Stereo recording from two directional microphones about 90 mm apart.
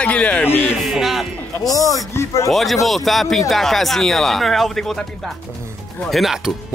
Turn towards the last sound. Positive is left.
turn(degrees=0)  # may be behind; listen again after turning